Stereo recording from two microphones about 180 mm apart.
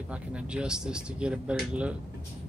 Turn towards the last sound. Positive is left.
turn(degrees=-5)  # may be behind; listen again after turning